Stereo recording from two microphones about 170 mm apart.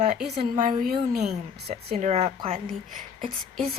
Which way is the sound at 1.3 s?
40° right (ahead or behind).